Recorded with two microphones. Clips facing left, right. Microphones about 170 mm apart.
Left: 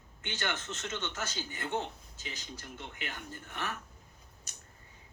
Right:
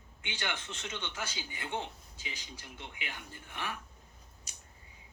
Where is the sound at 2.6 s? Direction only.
45° left (ahead or behind).